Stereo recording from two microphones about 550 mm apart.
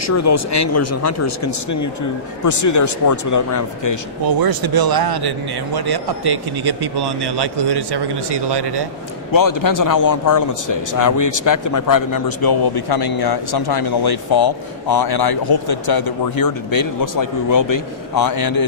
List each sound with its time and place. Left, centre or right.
0.0 s speech: left
4.2 s a man's voice: right
9.3 s speech: left